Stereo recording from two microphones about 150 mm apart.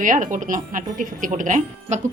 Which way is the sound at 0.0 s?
60° right (ahead or behind).